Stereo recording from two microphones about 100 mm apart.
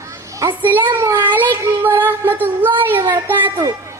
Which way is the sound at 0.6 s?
20° right (ahead or behind).